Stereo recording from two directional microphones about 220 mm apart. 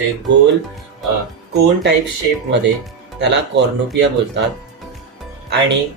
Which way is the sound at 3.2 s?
50° right (ahead or behind).